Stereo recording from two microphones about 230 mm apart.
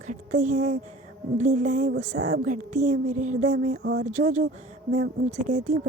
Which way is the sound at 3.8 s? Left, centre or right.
Right.